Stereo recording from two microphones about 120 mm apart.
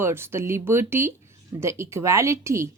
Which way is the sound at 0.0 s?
20° right (ahead or behind).